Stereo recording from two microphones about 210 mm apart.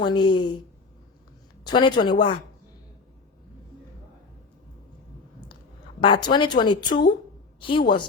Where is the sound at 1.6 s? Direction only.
20° left (ahead or behind).